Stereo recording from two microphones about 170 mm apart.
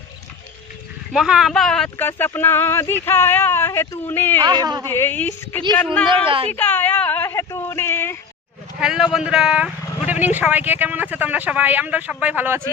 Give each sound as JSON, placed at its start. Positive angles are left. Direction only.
{"t": 1.1, "sound": "speech", "side_deg": 0}
{"t": 4.4, "sound": "speech", "side_deg": -25}
{"t": 4.9, "sound": "speech", "side_deg": 10}
{"t": 6.1, "sound": "a woman's voice", "side_deg": -30}
{"t": 6.5, "sound": "a sound", "side_deg": 10}
{"t": 8.8, "sound": "a man's voice", "side_deg": -5}